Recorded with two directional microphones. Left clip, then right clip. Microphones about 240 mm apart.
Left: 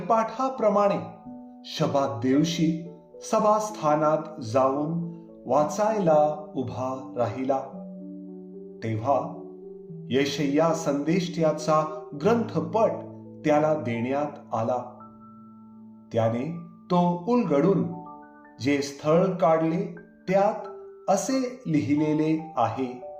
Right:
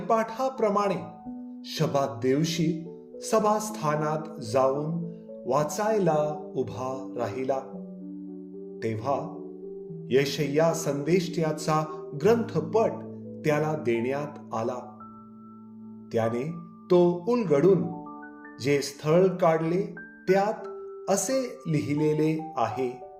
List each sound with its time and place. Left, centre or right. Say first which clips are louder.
0.1 s speech: left 2 dB; right
8.8 s speech: left 4 dB; right
16.1 s speech: left 2 dB; right